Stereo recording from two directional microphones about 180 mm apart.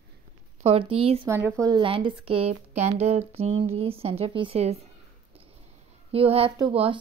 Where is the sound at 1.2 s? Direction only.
15° right (ahead or behind); by 4.7 s 35° right (ahead or behind).